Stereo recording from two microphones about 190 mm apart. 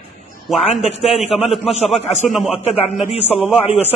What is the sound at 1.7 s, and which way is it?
Speech, 35° left (ahead or behind).